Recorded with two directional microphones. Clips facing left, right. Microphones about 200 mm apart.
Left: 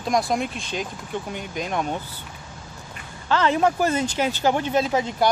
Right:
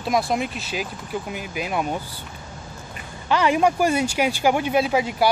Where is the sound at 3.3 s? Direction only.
15° right (ahead or behind).